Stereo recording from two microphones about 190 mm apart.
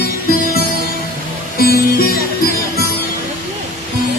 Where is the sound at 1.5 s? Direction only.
50° left (ahead or behind).